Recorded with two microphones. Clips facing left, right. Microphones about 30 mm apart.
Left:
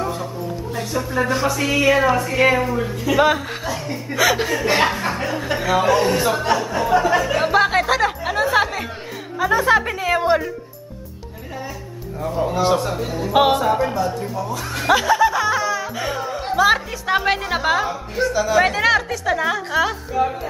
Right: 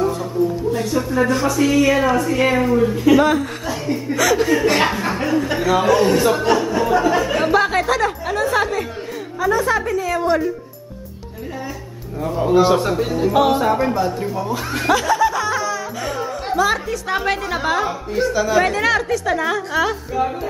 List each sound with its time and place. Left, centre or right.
0.0 s music: centre
1.1 s speech: centre
3.2 s speech: centre
4.1 s speech: centre
4.5 s speech: centre
9.4 s a woman's voice: left
12.2 s a man's voice: centre
14.9 s music: centre
16.5 s speech: centre
17.8 s a woman's voice: centre